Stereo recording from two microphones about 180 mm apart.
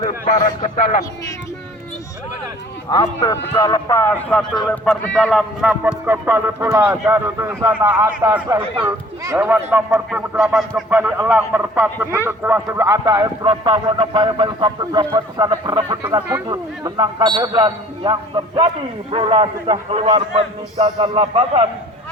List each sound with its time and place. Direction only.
0.0 s a man's voice: 45° left (ahead or behind)
2.9 s a man's voice: 20° left (ahead or behind); by 21.7 s 35° right (ahead or behind)